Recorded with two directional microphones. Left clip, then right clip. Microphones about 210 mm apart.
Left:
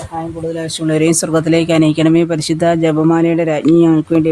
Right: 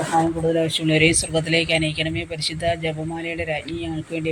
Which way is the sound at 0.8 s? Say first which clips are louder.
Left 9 dB; 25° left (ahead or behind).